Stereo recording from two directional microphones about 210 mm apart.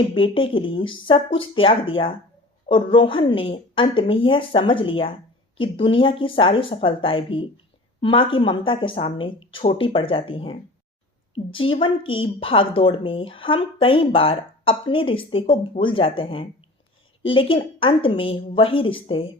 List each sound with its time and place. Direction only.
0.1 s a woman's voice: 25° left (ahead or behind)